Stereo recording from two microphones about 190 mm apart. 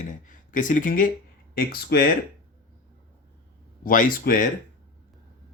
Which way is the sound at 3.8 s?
45° left (ahead or behind).